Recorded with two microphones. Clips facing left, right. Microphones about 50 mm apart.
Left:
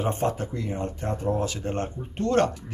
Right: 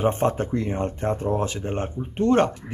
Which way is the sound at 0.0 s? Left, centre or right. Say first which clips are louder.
Right 4 dB; right.